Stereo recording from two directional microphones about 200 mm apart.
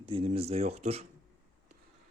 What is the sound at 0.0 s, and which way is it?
Speech, 25° right (ahead or behind).